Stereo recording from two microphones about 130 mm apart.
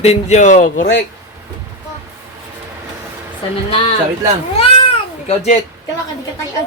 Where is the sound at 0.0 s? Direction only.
60° left (ahead or behind).